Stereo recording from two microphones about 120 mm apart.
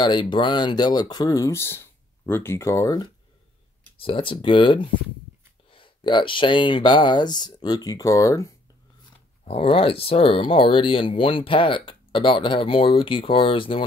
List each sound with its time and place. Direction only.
0.0 s speech: 40° left (ahead or behind)
4.0 s speech: 45° left (ahead or behind); by 8.5 s 30° left (ahead or behind)
9.4 s speech: 55° left (ahead or behind)